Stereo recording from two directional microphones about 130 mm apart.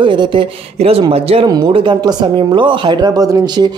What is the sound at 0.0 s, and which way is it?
Speech, 40° right (ahead or behind).